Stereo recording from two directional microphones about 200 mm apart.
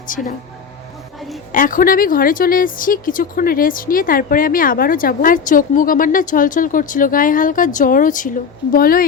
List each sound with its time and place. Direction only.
0.1 s speech: 40° left (ahead or behind)
1.5 s a woman's voice: 45° left (ahead or behind)